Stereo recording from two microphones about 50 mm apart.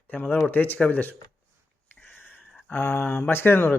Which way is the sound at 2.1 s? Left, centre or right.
Left.